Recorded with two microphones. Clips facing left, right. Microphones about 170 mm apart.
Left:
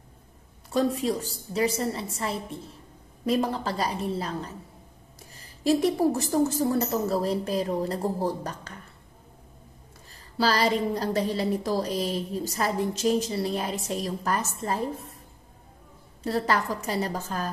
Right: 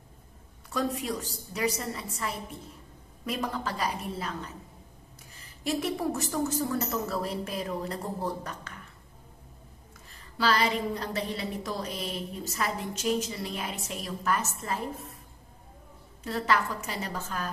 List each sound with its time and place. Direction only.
0.7 s a woman's voice: 30° left (ahead or behind)
10.3 s a woman's voice: 35° left (ahead or behind)
16.3 s a woman's voice: 35° left (ahead or behind)